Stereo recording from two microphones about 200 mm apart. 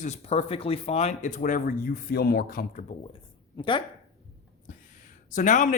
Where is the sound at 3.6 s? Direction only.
25° left (ahead or behind).